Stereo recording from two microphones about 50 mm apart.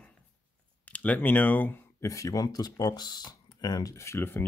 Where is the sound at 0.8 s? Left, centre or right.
Left.